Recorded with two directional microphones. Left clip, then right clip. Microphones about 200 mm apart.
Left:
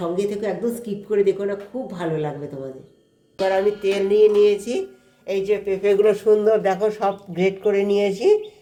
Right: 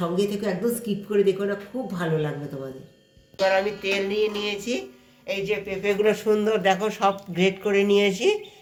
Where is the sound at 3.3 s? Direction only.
45° left (ahead or behind).